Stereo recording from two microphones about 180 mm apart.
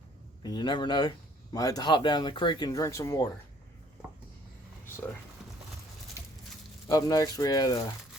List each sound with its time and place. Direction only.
0.4 s speech: 25° left (ahead or behind)
6.8 s speech: 20° left (ahead or behind)